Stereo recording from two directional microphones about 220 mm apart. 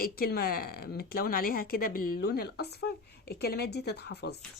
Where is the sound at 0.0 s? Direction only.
45° left (ahead or behind).